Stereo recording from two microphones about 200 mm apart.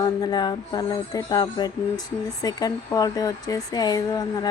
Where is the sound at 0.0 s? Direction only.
20° left (ahead or behind).